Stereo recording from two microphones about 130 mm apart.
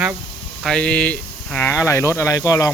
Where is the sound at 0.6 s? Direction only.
5° left (ahead or behind).